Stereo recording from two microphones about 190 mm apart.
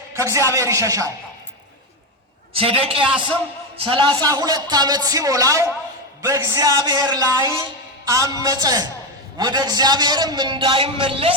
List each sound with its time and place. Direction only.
0.2 s a man's voice: 15° right (ahead or behind)
2.5 s a man's voice: 30° right (ahead or behind)